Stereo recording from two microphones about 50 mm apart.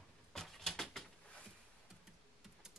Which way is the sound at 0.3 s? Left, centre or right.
Centre.